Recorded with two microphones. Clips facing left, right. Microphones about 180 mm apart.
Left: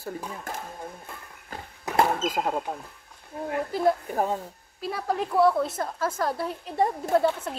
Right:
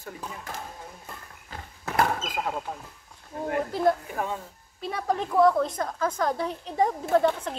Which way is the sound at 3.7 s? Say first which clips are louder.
Left 2 dB; 5° left (ahead or behind).